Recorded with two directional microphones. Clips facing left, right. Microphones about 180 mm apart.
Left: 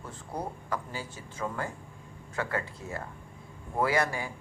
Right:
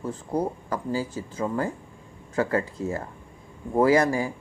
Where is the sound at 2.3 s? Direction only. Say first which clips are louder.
Right 8 dB; 35° right (ahead or behind).